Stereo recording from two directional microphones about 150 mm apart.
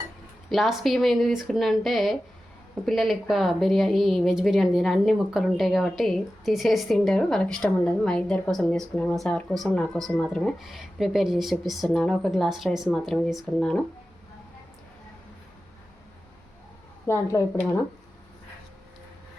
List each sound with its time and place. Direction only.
0.5 s a woman's voice: centre (ahead or behind)
17.1 s a woman's voice: 20° left (ahead or behind)